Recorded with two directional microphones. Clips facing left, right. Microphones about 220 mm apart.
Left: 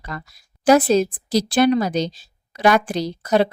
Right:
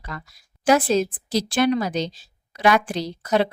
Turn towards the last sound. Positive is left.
turn(degrees=40)  # may be behind; listen again after turning